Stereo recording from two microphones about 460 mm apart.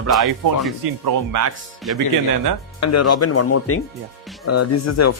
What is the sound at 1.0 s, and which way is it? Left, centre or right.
Speech, right.